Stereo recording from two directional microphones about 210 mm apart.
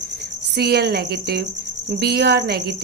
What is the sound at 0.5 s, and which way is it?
Speech, 50° right (ahead or behind).